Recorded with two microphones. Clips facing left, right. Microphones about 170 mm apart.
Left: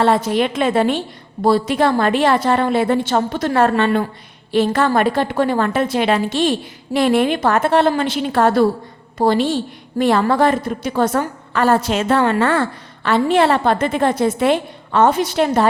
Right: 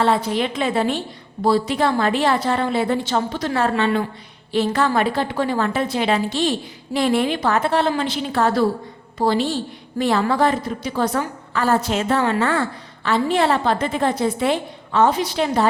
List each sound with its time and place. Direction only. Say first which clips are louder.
0.0 s a woman's voice: left 3 dB; 60° left (ahead or behind)
11.5 s a woman's voice: left 3 dB; 70° left (ahead or behind); by 15.6 s 50° left (ahead or behind)